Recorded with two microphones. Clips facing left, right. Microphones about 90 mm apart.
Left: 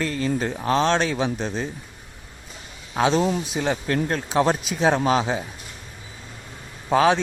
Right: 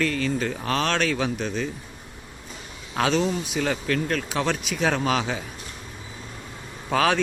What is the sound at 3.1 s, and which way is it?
Speech, 40° left (ahead or behind).